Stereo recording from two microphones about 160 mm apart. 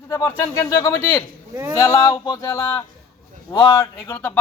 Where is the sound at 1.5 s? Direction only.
15° right (ahead or behind).